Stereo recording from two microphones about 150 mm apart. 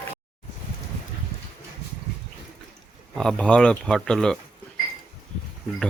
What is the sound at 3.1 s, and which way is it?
Speech, 5° left (ahead or behind).